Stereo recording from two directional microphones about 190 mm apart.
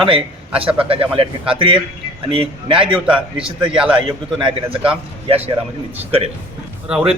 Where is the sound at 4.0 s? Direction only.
25° right (ahead or behind).